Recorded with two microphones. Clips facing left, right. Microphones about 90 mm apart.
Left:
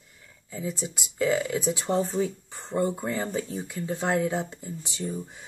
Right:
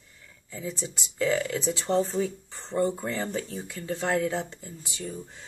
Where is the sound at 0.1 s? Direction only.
15° left (ahead or behind).